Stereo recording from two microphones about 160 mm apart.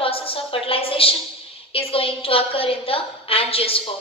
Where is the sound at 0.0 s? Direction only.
35° left (ahead or behind).